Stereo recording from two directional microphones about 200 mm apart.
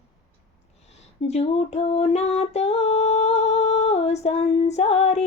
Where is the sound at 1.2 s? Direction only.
30° left (ahead or behind).